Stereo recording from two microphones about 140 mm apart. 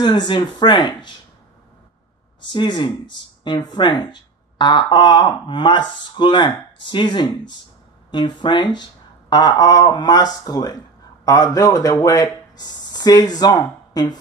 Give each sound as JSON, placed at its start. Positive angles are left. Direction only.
{"t": 0.0, "sound": "speech", "side_deg": 30}
{"t": 2.4, "sound": "speech", "side_deg": 35}